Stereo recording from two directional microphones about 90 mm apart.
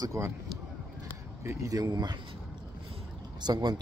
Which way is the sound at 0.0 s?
35° right (ahead or behind).